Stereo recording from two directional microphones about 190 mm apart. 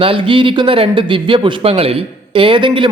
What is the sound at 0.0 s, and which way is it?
Speech, 30° right (ahead or behind).